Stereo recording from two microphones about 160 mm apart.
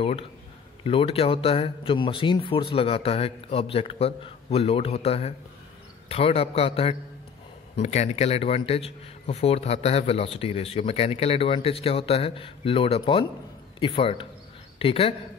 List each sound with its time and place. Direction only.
0.8 s speech: 35° left (ahead or behind)